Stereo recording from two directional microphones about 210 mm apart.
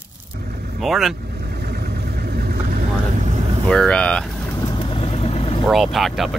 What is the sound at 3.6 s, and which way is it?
Speech, 5° left (ahead or behind).